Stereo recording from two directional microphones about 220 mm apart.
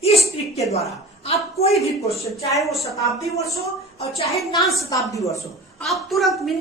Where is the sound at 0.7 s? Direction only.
30° left (ahead or behind).